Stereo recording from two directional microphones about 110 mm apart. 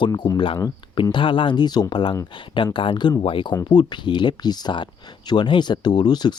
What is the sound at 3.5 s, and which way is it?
Speech, 35° left (ahead or behind).